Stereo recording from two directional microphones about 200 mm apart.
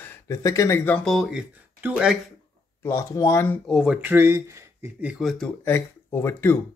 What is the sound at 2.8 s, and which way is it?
Speech, 15° left (ahead or behind).